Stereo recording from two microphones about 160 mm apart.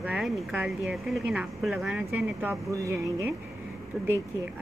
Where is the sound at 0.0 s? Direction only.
5° right (ahead or behind).